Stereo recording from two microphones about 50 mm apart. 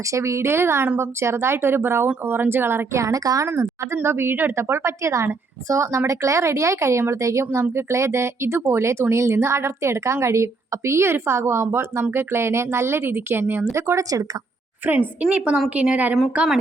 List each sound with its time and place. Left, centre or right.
0.1 s a woman's voice: right
0.4 s a woman's voice: right
3.0 s a woman's voice: right
3.5 s a woman's voice: right
7.1 s a woman's voice: right
7.7 s speech: right
13.4 s a woman's voice: right
13.7 s speech: right
14.9 s a woman's voice: right